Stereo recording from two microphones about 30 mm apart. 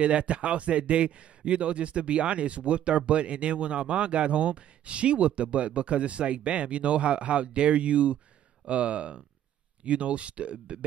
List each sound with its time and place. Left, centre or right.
0.0 s a man's voice: right